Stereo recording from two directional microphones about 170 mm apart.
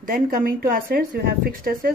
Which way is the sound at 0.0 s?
55° right (ahead or behind).